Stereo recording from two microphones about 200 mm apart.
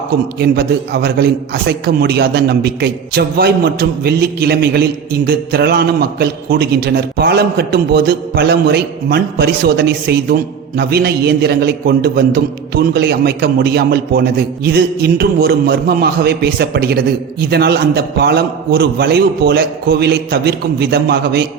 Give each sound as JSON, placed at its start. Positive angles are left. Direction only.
{"t": 0.3, "sound": "a man's voice", "side_deg": -50}